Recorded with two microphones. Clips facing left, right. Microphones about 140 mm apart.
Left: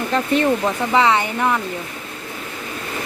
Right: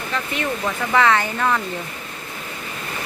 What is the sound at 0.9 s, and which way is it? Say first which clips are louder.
Speech: even; 15° left (ahead or behind).